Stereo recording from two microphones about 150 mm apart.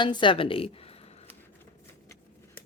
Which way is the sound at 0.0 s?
30° left (ahead or behind).